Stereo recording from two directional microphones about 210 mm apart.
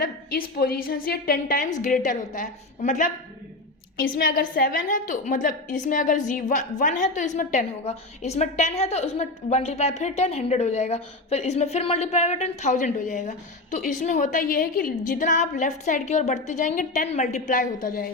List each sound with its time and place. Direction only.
0.0 s a woman's voice: 45° left (ahead or behind)
4.1 s a woman's voice: 45° left (ahead or behind)